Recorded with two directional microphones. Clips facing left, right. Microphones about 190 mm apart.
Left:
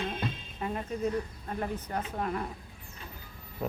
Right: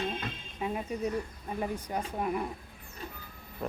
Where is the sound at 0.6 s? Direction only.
10° right (ahead or behind).